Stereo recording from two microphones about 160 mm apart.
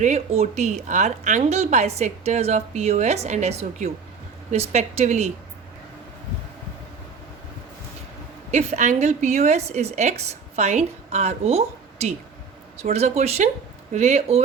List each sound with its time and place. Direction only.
0.0 s a woman's voice: 45° right (ahead or behind)
8.4 s a woman's voice: 45° right (ahead or behind)